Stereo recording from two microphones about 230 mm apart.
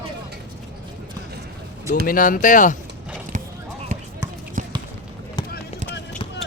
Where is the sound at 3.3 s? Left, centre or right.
Right.